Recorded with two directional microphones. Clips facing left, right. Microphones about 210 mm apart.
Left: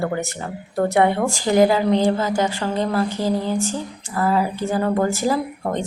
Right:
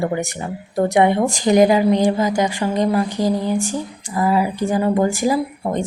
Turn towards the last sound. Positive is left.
turn(degrees=-10)  # may be behind; listen again after turning